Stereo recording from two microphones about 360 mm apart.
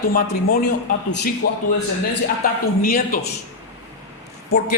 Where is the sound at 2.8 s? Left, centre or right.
Left.